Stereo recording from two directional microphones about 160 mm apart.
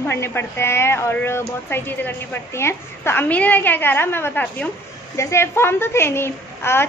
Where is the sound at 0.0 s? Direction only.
15° left (ahead or behind).